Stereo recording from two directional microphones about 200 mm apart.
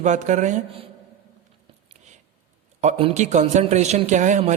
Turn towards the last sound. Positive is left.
turn(degrees=-35)  # may be behind; listen again after turning